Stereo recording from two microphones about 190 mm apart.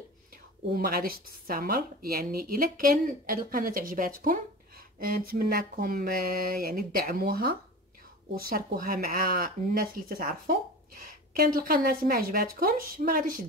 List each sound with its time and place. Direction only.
0.7 s a woman's voice: 50° right (ahead or behind)